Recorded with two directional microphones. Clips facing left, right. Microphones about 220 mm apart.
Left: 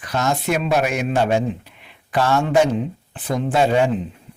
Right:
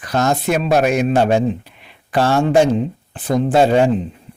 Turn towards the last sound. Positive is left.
turn(degrees=-35)  # may be behind; listen again after turning